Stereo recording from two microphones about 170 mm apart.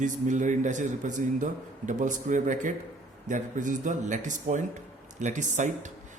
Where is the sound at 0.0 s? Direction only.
45° right (ahead or behind).